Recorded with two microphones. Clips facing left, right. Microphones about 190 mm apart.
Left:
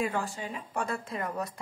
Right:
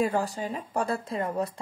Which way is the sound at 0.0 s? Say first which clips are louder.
Right 5 dB; 40° right (ahead or behind).